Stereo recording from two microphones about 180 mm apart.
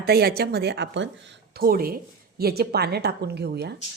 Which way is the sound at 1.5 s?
55° right (ahead or behind).